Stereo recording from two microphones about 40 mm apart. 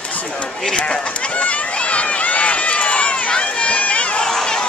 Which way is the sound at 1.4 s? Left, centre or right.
Left.